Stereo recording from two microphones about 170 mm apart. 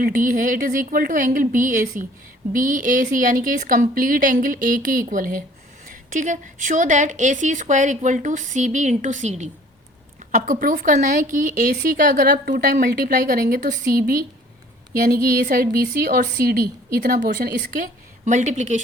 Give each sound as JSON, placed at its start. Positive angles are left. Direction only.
{"t": 0.0, "sound": "a woman's voice", "side_deg": -55}
{"t": 15.0, "sound": "a woman's voice", "side_deg": -55}